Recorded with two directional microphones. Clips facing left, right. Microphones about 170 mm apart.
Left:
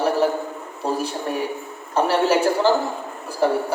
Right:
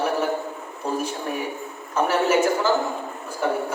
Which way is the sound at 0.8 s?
35° left (ahead or behind).